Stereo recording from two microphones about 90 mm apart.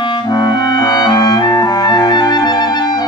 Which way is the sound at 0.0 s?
55° left (ahead or behind).